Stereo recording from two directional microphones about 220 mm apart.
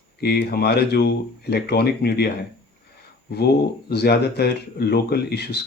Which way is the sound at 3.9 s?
45° left (ahead or behind).